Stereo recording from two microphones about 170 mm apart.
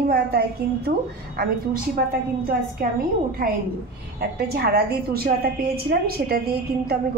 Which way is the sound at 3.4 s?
60° right (ahead or behind).